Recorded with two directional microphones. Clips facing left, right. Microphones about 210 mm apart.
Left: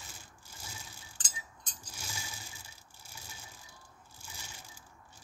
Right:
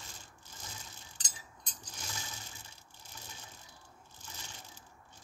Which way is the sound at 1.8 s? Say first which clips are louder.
Even; 10° left (ahead or behind).